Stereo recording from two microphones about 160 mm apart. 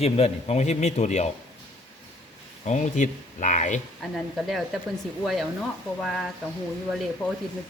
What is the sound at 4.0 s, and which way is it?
Speech, centre (ahead or behind).